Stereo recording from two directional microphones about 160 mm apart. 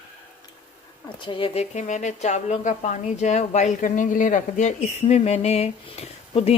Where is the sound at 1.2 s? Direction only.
30° left (ahead or behind).